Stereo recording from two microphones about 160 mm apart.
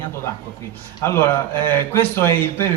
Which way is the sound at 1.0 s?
15° left (ahead or behind).